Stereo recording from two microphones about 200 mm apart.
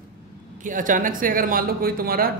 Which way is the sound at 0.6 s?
40° right (ahead or behind).